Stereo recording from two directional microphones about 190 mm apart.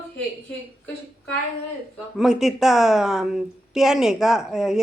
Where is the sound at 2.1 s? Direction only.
Centre (ahead or behind).